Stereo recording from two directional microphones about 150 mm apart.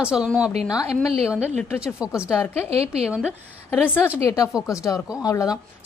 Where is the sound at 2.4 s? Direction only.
15° left (ahead or behind).